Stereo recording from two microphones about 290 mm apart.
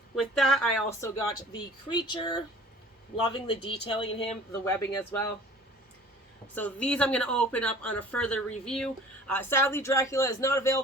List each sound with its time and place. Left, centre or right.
0.2 s speech: centre
6.5 s speech: centre